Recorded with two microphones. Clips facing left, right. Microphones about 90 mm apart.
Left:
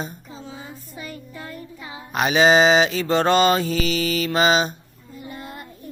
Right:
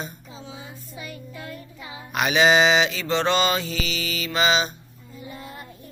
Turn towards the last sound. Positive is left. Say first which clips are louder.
# left 3 dB
turn(degrees=45)  # may be behind; listen again after turning